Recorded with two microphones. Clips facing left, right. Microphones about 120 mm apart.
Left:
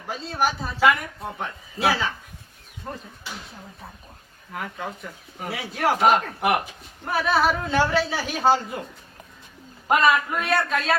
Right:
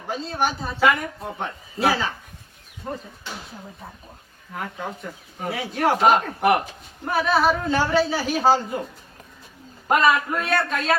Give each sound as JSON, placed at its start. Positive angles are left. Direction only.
{"t": 0.1, "sound": "speech", "side_deg": 0}
{"t": 4.5, "sound": "speech", "side_deg": 0}
{"t": 9.9, "sound": "speech", "side_deg": 0}